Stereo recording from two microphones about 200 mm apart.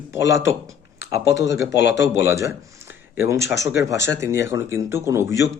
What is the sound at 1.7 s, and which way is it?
Speech, 60° left (ahead or behind).